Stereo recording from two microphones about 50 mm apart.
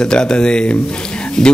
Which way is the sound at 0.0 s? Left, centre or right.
Centre.